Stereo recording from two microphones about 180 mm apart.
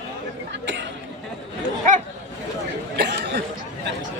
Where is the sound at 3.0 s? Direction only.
65° right (ahead or behind).